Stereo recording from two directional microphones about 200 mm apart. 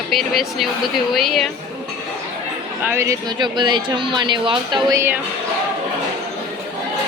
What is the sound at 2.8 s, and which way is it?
Speech, 15° right (ahead or behind).